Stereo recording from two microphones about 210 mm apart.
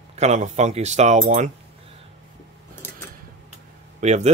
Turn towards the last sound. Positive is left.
turn(degrees=-35)  # may be behind; listen again after turning